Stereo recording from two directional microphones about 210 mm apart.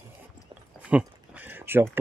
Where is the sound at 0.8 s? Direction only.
5° right (ahead or behind).